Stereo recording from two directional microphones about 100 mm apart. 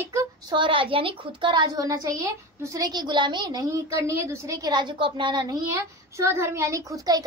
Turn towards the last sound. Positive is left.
turn(degrees=-40)  # may be behind; listen again after turning